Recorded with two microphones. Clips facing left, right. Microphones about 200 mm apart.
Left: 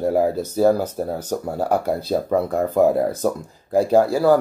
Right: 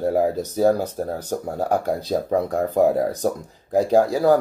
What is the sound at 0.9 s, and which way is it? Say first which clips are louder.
Speech: left 1 dB; 10° left (ahead or behind).